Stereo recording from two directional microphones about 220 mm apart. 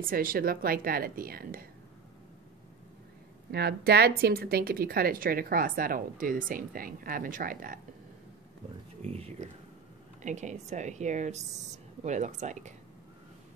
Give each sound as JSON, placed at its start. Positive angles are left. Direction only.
{"t": 0.0, "sound": "speech", "side_deg": -40}
{"t": 3.5, "sound": "speech", "side_deg": -45}
{"t": 9.0, "sound": "speech", "side_deg": -30}